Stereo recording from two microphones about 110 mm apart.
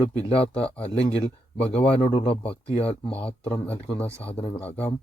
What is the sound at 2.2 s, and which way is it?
Speech, 60° left (ahead or behind).